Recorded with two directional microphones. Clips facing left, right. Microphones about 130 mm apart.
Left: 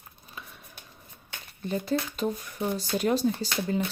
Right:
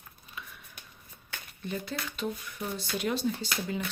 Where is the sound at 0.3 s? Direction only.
35° left (ahead or behind).